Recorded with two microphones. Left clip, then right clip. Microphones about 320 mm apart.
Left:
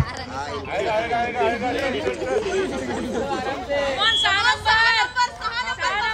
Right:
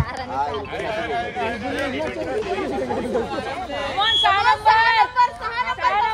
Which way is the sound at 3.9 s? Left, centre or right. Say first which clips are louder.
Right 3 dB; centre.